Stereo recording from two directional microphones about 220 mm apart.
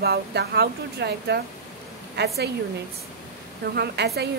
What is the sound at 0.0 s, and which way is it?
A woman's voice, 45° right (ahead or behind).